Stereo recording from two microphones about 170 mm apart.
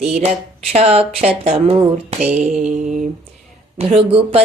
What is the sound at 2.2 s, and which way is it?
Mantra, 5° right (ahead or behind).